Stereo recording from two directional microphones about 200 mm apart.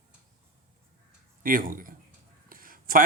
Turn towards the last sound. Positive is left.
turn(degrees=-45)  # may be behind; listen again after turning